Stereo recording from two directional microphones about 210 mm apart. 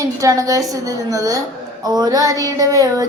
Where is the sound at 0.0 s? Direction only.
15° right (ahead or behind).